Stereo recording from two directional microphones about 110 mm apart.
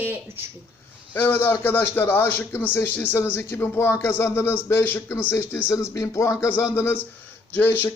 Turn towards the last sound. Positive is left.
turn(degrees=15)  # may be behind; listen again after turning